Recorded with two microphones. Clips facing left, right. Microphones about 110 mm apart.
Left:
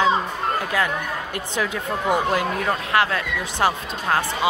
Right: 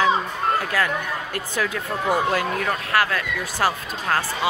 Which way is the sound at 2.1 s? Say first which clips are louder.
Even; 20° left (ahead or behind).